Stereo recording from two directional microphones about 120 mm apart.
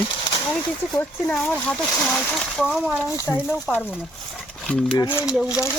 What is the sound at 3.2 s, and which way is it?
Speech, 20° left (ahead or behind).